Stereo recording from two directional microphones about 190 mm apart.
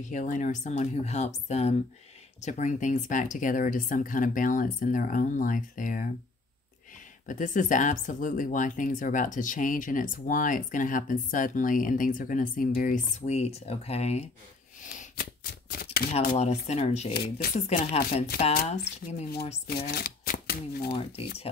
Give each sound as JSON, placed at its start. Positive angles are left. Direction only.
{"t": 0.1, "sound": "speech", "side_deg": 40}
{"t": 7.2, "sound": "speech", "side_deg": 40}
{"t": 14.8, "sound": "a sound", "side_deg": 40}
{"t": 15.8, "sound": "shuffling cards", "side_deg": 50}
{"t": 16.3, "sound": "speech", "side_deg": 35}
{"t": 17.1, "sound": "speech", "side_deg": 50}
{"t": 17.6, "sound": "speech", "side_deg": 35}
{"t": 19.9, "sound": "speech", "side_deg": 55}